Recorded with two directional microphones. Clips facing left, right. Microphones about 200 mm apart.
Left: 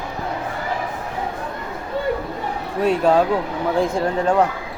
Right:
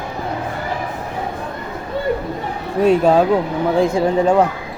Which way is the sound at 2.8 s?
5° right (ahead or behind).